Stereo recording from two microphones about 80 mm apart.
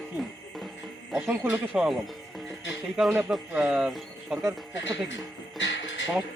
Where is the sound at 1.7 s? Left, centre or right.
Centre.